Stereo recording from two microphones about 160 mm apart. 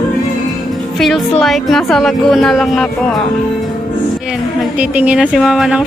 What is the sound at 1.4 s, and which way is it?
Speech, centre (ahead or behind).